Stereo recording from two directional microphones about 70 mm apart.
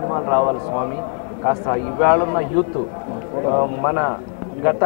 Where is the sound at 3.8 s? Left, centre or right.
Centre.